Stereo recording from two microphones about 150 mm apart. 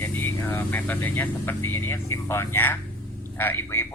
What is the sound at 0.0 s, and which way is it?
A man's voice, 15° left (ahead or behind).